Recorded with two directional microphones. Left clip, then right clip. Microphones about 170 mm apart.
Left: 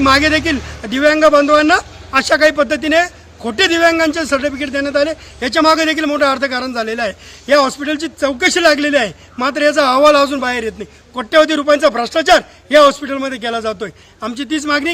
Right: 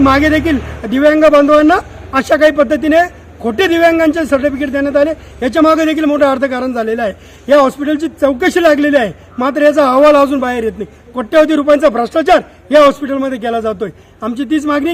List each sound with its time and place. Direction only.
0.0 s a man's voice: 10° left (ahead or behind)